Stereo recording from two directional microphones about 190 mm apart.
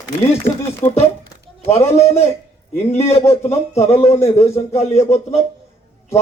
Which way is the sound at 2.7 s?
35° left (ahead or behind).